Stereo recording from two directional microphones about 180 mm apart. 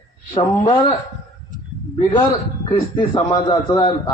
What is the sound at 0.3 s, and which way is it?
Speech, 30° left (ahead or behind).